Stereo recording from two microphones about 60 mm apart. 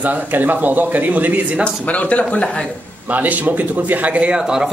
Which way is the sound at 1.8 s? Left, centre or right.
Left.